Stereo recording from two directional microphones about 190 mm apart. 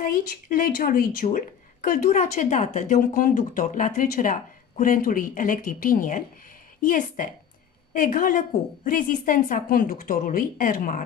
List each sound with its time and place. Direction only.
0.0 s a woman's voice: 50° left (ahead or behind)